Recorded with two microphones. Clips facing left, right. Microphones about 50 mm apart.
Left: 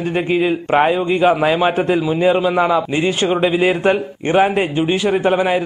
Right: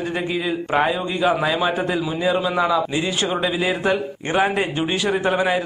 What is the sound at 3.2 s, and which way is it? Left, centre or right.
A man's voice, left.